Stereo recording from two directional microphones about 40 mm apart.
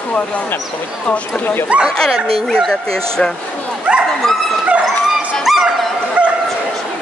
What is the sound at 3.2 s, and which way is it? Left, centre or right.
Speech, left.